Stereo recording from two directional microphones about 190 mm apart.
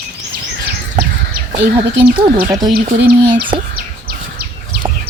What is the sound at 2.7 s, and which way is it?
Speech, 55° right (ahead or behind).